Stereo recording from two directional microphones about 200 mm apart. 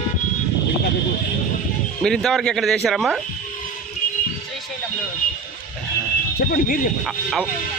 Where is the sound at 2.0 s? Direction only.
5° left (ahead or behind).